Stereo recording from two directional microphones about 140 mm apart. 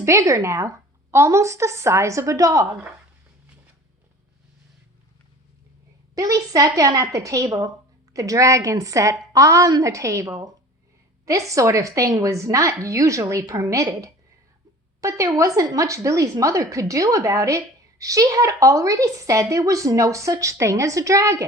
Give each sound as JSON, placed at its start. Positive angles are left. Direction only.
{"t": 0.0, "sound": "a woman's voice", "side_deg": -20}
{"t": 6.1, "sound": "a woman's voice", "side_deg": -25}